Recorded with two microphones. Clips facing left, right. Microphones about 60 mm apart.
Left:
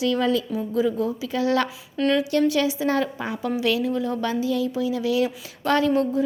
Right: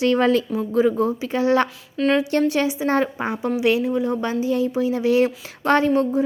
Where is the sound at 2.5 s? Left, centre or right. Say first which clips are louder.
Right 2 dB; right.